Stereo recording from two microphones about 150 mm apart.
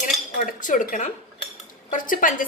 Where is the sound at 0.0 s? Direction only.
60° left (ahead or behind).